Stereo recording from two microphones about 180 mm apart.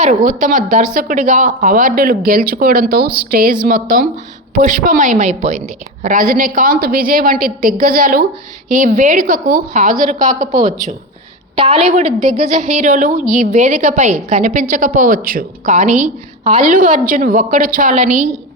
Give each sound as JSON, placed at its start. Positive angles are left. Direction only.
{"t": 0.0, "sound": "a woman's voice", "side_deg": -45}